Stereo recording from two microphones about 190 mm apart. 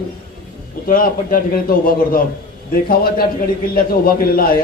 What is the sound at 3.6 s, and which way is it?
Speech, 50° left (ahead or behind).